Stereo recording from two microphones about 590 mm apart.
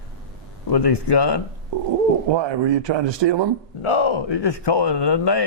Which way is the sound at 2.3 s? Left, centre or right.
Right.